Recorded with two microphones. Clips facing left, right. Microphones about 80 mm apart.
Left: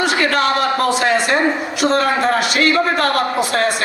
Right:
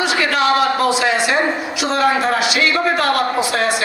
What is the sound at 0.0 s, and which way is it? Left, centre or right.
A man's voice, left.